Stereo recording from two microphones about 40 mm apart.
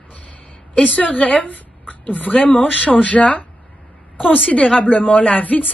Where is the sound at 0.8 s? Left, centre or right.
Left.